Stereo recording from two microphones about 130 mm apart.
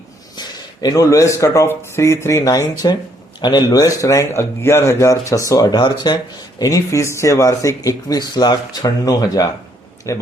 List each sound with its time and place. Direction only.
0.3 s speech: 30° left (ahead or behind)